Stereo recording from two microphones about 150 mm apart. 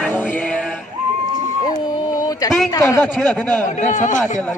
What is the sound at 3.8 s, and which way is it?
Speech, 55° left (ahead or behind).